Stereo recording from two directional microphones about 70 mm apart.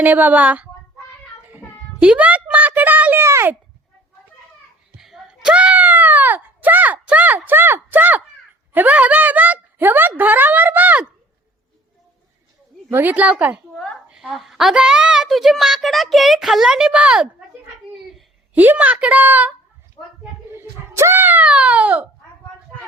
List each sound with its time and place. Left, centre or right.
0.0 s speech: right
1.5 s child singing: right
2.0 s speech: centre
3.2 s speech: right
4.9 s wail: centre; by 8.2 s right
8.7 s speech: right
12.9 s speech: right
13.7 s a woman's voice: centre
14.3 s a woman's voice: centre
18.5 s speech: right
20.6 s a sound: right
21.4 s speech: centre